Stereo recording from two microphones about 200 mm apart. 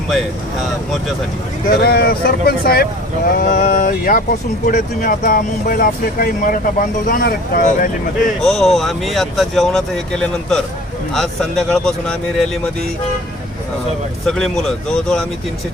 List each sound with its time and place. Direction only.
1.8 s speech: 50° left (ahead or behind)
8.4 s speech: centre (ahead or behind)
14.3 s speech: 5° left (ahead or behind)